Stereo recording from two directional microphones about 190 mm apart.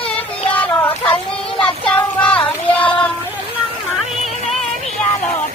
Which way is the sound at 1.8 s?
5° left (ahead or behind).